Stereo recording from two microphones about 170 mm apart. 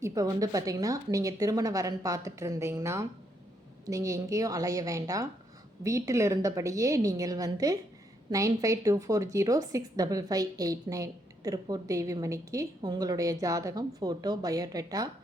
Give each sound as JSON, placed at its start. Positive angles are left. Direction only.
{"t": 0.0, "sound": "a woman's voice", "side_deg": -20}